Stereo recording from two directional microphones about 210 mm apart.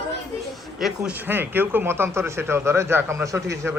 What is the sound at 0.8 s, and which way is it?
Speech, 5° right (ahead or behind).